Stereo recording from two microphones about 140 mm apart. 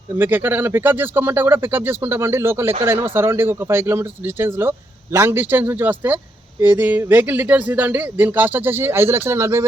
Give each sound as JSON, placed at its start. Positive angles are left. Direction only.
{"t": 0.2, "sound": "speech", "side_deg": -15}